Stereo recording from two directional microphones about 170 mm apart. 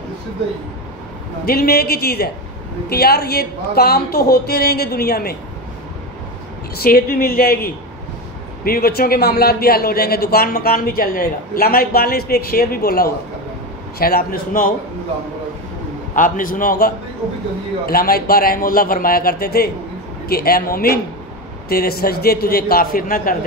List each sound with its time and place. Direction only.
1.4 s a man's voice: 65° left (ahead or behind)
6.8 s a man's voice: 60° left (ahead or behind)
16.2 s a man's voice: 50° left (ahead or behind)